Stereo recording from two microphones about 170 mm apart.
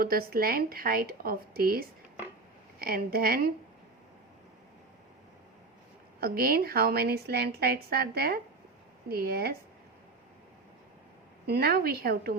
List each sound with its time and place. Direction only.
0.0 s a woman's voice: 60° right (ahead or behind)
6.1 s a woman's voice: 60° right (ahead or behind)
11.4 s a woman's voice: 70° right (ahead or behind)